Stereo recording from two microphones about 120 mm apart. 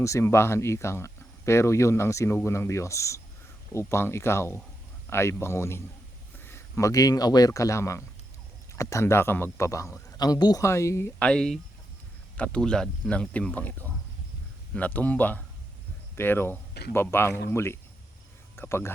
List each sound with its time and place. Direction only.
0.0 s speech: 25° left (ahead or behind)
11.2 s speech: 5° left (ahead or behind)